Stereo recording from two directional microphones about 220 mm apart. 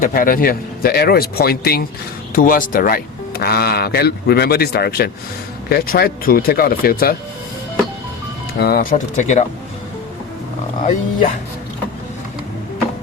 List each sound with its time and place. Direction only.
0.0 s speech: 40° left (ahead or behind)
8.5 s speech: 45° left (ahead or behind)
10.8 s speech: 35° left (ahead or behind)